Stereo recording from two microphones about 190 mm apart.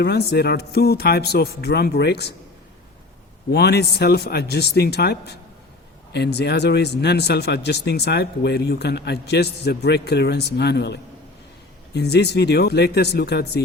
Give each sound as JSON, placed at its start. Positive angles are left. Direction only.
{"t": 0.0, "sound": "speech", "side_deg": 60}
{"t": 3.5, "sound": "speech", "side_deg": 60}